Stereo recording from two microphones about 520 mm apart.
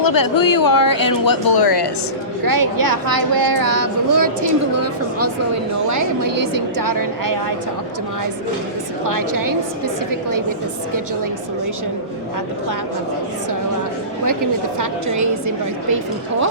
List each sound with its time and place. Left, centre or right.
0.0 s speech: left
2.4 s a woman's voice: right
9.0 s a woman's voice: right
14.8 s a woman's voice: right